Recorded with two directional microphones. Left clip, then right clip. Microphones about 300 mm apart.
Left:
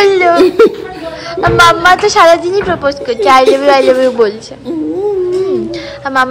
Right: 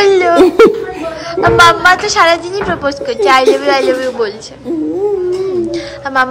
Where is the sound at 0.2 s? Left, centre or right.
Centre.